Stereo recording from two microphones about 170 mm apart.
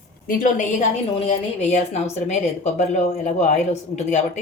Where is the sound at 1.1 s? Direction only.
40° left (ahead or behind).